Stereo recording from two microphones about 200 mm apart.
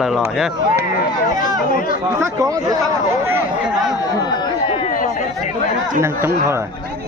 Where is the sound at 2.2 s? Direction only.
15° right (ahead or behind).